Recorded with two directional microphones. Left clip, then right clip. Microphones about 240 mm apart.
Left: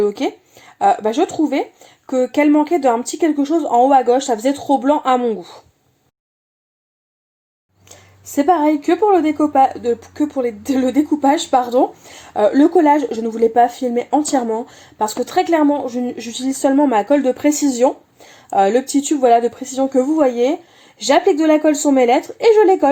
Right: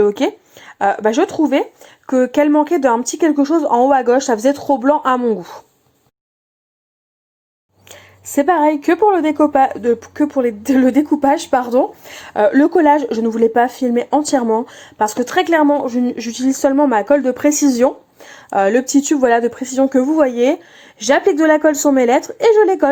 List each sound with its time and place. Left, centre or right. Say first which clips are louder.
0.0 s a woman's voice: right 3 dB; centre
8.4 s a woman's voice: right 1 dB; right